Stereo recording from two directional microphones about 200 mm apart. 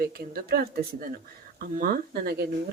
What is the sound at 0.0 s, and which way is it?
Speech, 50° right (ahead or behind).